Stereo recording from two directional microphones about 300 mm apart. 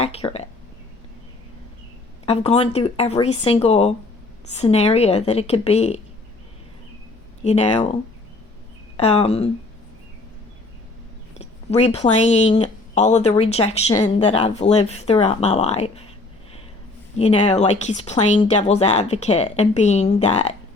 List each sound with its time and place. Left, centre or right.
0.0 s a sound: centre
2.2 s speech: centre
7.4 s speech: left
9.0 s speech: centre
11.3 s speech: left
17.2 s speech: left